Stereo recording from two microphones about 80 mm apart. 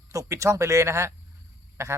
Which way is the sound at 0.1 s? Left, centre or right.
Right.